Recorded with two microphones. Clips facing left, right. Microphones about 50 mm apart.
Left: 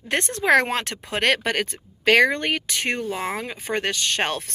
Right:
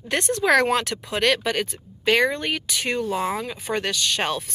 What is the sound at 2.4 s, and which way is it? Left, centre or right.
Speech, left.